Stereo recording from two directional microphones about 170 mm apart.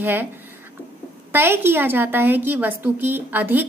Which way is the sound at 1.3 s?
15° right (ahead or behind).